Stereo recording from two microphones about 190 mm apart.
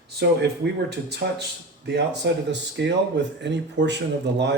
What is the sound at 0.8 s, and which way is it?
Speech, 60° right (ahead or behind).